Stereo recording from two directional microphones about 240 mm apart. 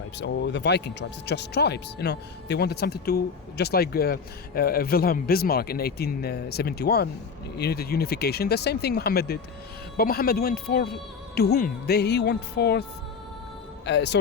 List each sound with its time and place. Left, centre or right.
0.2 s speech: left
13.8 s speech: left